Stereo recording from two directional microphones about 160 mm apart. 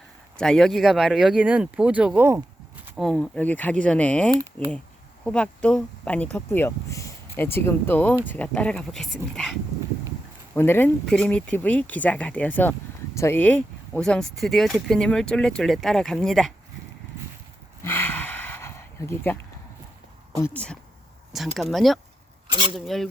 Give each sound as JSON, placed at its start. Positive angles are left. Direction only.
{"t": 0.3, "sound": "speech", "side_deg": 5}
{"t": 2.8, "sound": "a sound", "side_deg": -5}
{"t": 3.1, "sound": "speech", "side_deg": 5}
{"t": 10.5, "sound": "speech", "side_deg": 15}
{"t": 17.8, "sound": "a sound", "side_deg": 10}
{"t": 20.3, "sound": "speech", "side_deg": 10}
{"t": 22.4, "sound": "speech", "side_deg": -30}
{"t": 22.9, "sound": "speech", "side_deg": 0}